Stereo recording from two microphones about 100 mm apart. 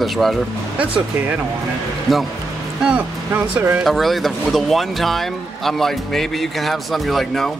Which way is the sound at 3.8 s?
Centre (ahead or behind).